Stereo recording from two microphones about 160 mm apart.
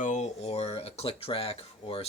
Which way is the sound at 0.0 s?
45° left (ahead or behind).